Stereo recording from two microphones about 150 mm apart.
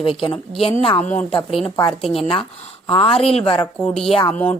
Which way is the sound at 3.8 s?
5° left (ahead or behind).